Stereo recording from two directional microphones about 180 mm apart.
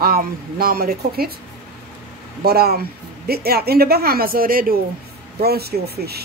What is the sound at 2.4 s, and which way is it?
Speech, 60° right (ahead or behind).